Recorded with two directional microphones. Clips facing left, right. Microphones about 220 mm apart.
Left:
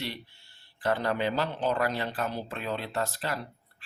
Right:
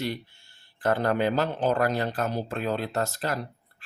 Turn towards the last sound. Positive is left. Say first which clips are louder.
# right 3 dB
turn(degrees=-45)  # may be behind; listen again after turning